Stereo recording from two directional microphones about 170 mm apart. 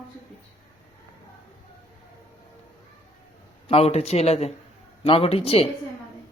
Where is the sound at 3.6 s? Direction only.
35° left (ahead or behind).